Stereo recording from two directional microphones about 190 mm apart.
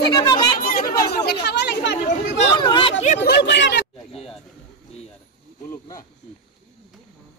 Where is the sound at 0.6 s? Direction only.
50° left (ahead or behind).